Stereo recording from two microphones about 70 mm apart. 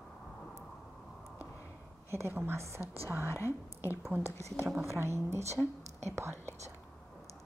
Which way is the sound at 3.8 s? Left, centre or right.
Right.